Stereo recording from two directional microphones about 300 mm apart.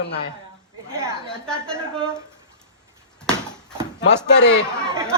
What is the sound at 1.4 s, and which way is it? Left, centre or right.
Speech, centre.